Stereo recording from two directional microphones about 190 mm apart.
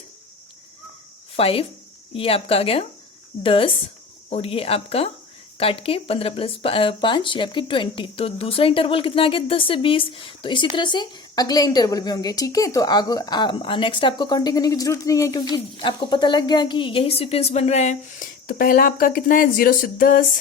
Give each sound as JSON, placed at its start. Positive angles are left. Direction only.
{"t": 1.4, "sound": "a woman's voice", "side_deg": 30}